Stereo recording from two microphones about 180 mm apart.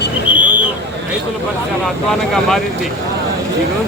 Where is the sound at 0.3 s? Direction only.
10° right (ahead or behind).